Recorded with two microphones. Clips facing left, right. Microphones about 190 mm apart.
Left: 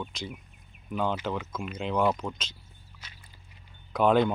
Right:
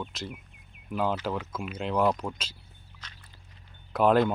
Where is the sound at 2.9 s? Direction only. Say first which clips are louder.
Right 1 dB; 10° left (ahead or behind).